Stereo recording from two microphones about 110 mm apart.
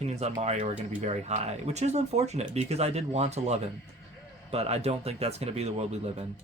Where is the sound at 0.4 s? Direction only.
85° right.